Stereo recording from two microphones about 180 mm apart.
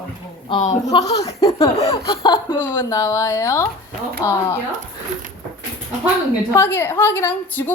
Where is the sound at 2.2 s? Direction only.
25° left (ahead or behind).